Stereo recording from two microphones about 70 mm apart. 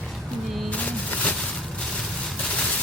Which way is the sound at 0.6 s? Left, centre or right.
Left.